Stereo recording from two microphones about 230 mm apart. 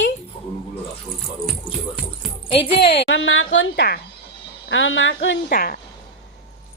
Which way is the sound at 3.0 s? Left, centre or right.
Left.